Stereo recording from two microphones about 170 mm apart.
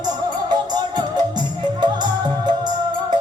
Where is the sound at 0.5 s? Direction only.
25° right (ahead or behind).